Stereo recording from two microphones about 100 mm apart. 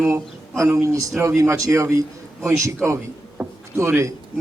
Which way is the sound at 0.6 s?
30° right (ahead or behind).